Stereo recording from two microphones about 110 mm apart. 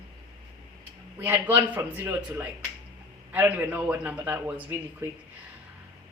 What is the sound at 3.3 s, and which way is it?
A woman's voice, 15° right (ahead or behind).